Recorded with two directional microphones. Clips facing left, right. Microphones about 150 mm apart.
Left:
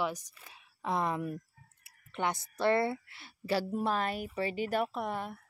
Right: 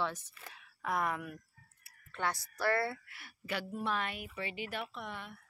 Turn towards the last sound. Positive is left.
turn(degrees=40)  # may be behind; listen again after turning